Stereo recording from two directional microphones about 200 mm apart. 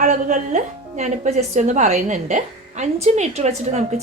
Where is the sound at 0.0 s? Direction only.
40° right (ahead or behind).